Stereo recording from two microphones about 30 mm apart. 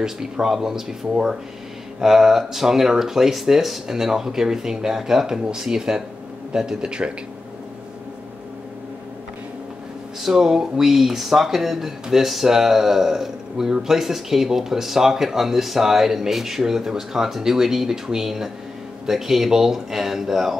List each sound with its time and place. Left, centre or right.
0.0 s speech: centre
2.0 s speech: centre
6.8 s speech: right
10.2 s speech: centre